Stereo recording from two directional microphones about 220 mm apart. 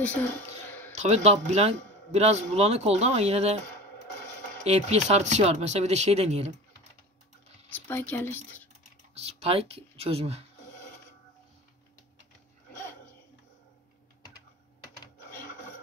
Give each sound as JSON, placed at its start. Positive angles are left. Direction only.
{"t": 0.9, "sound": "a man's voice", "side_deg": -30}
{"t": 4.6, "sound": "a man's voice", "side_deg": -30}
{"t": 7.7, "sound": "speech", "side_deg": 10}
{"t": 9.1, "sound": "a man's voice", "side_deg": -30}